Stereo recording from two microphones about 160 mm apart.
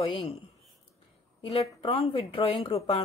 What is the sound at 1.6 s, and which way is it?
Speech, 35° left (ahead or behind).